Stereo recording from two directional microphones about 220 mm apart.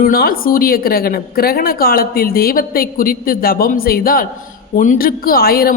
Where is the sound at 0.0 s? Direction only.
40° left (ahead or behind).